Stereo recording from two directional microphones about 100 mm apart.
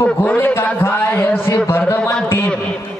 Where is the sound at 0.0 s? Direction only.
20° left (ahead or behind).